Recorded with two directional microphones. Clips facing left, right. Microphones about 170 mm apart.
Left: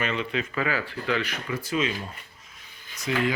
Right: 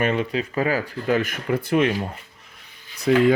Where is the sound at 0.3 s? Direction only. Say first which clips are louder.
Right 5 dB; 40° right (ahead or behind).